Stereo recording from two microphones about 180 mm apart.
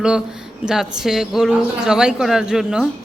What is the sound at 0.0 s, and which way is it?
A man's voice, 5° right (ahead or behind).